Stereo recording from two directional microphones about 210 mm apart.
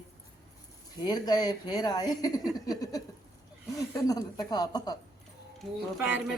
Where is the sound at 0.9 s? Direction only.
20° left (ahead or behind).